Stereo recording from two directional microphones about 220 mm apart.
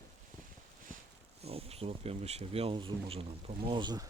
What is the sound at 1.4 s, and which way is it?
Speech, 25° right (ahead or behind).